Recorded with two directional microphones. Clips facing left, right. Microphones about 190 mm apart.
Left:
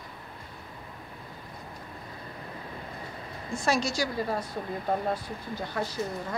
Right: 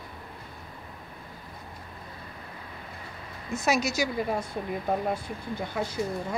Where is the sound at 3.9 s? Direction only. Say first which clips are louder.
Right 2 dB; 20° right (ahead or behind).